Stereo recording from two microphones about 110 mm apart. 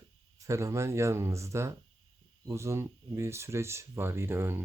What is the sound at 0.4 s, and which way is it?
Speech, 25° right (ahead or behind).